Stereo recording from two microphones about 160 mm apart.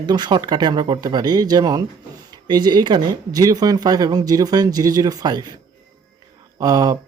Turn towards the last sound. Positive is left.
turn(degrees=-25)  # may be behind; listen again after turning